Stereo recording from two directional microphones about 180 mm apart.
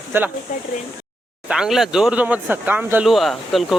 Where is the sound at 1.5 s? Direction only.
5° right (ahead or behind).